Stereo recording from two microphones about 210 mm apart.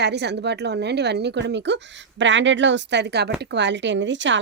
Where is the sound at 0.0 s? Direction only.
55° right (ahead or behind).